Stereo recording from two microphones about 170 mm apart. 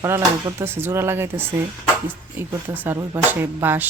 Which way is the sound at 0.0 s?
15° right (ahead or behind).